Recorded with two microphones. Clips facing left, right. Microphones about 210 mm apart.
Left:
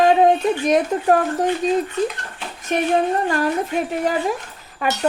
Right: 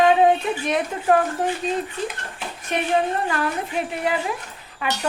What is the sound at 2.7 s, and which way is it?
Speech, 45° left (ahead or behind).